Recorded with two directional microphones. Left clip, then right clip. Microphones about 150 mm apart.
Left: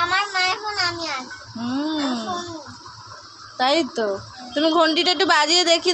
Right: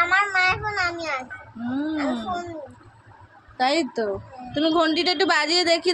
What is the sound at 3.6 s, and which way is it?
A man's voice, 5° right (ahead or behind).